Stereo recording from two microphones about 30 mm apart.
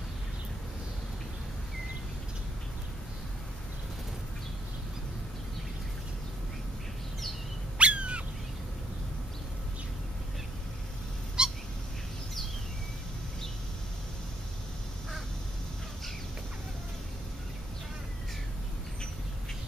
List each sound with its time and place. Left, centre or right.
7.7 s bird: right
11.4 s cat: right